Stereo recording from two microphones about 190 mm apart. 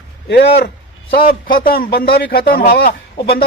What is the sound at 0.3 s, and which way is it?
A man's voice, 55° left (ahead or behind).